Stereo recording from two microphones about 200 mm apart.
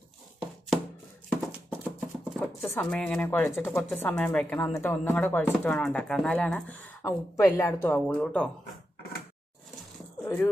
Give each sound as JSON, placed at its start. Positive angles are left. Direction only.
{"t": 1.9, "sound": "chopping", "side_deg": 0}
{"t": 2.7, "sound": "speech", "side_deg": 10}
{"t": 10.2, "sound": "speech", "side_deg": 10}